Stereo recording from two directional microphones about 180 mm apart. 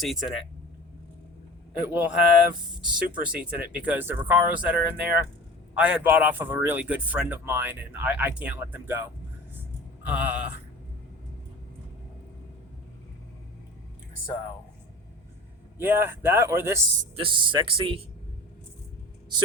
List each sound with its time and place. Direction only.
0.0 s speech: centre (ahead or behind)
1.8 s speech: 10° right (ahead or behind)
10.0 s a sound: 10° right (ahead or behind)
15.8 s speech: 10° right (ahead or behind)
17.2 s a man's voice: 25° right (ahead or behind)